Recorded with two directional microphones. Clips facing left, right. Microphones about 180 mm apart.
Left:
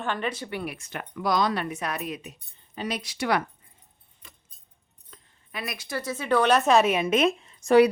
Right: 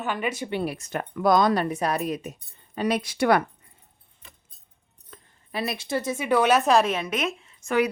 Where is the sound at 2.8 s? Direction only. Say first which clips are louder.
Right 7 dB; 55° right (ahead or behind).